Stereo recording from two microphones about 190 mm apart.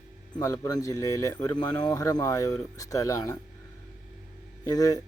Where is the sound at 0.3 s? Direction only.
20° left (ahead or behind).